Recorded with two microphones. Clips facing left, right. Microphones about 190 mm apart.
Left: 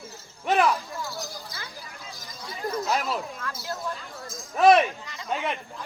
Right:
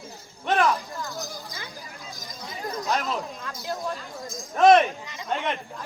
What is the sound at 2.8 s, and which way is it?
Clang, 5° left (ahead or behind).